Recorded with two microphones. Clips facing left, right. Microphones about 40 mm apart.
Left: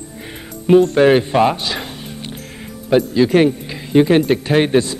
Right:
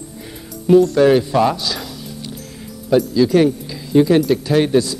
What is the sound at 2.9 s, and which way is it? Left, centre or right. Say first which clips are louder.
Speech: left 1 dB; left.